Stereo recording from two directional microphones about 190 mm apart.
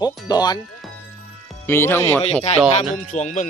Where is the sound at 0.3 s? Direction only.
20° left (ahead or behind).